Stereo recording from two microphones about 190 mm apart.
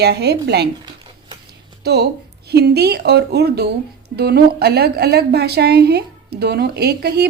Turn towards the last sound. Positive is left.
turn(degrees=-55)  # may be behind; listen again after turning